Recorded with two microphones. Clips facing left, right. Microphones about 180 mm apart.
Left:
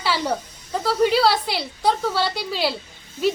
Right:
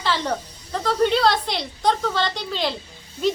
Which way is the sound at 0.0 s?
10° left (ahead or behind).